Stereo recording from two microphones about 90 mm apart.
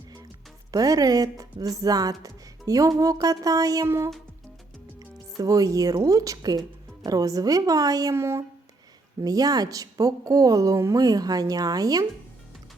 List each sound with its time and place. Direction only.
0.7 s speech: 45° right (ahead or behind)
3.8 s a woman's voice: 30° right (ahead or behind)
5.4 s a woman's voice: 40° right (ahead or behind)
8.1 s a woman's voice: 30° right (ahead or behind)
9.2 s speech: 45° right (ahead or behind)